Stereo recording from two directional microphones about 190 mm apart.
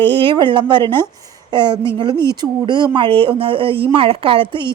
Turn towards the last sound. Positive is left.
turn(degrees=-25)  # may be behind; listen again after turning